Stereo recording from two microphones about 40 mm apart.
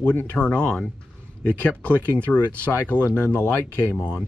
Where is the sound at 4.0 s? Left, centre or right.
Right.